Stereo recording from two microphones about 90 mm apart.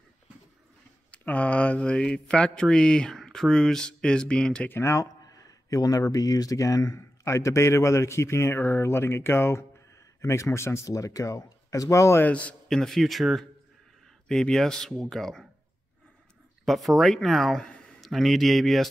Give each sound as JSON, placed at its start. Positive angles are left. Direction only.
{"t": 1.1, "sound": "speech", "side_deg": 15}
{"t": 4.6, "sound": "speech", "side_deg": 30}
{"t": 12.2, "sound": "speech", "side_deg": 15}
{"t": 12.6, "sound": "speech", "side_deg": 5}
{"t": 16.6, "sound": "speech", "side_deg": 0}